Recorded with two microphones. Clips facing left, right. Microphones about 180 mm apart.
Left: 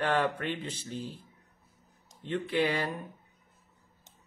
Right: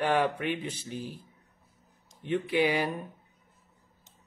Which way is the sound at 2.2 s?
15° right (ahead or behind).